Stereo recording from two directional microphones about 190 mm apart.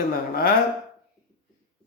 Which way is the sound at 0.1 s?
50° left (ahead or behind).